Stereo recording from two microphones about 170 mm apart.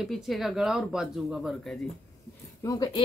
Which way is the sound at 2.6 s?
20° left (ahead or behind).